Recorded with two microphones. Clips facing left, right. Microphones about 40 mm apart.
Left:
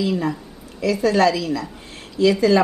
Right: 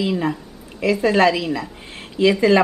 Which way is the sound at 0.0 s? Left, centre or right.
Right.